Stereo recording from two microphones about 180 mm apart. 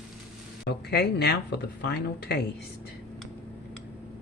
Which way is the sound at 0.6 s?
65° left (ahead or behind).